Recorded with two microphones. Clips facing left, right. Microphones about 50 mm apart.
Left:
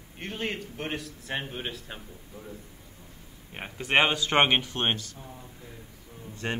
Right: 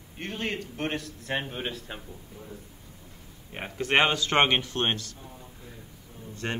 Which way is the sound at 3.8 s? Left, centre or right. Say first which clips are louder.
Even; centre.